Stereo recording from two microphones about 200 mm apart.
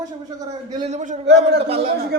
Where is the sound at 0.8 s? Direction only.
35° right (ahead or behind).